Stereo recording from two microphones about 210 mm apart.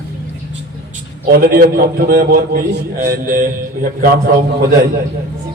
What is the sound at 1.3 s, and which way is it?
A man's voice, 45° right (ahead or behind).